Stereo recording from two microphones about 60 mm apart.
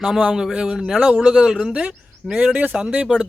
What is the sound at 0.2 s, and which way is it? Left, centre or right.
Speech, centre.